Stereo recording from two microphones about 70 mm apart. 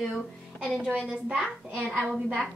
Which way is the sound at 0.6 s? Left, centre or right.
Centre.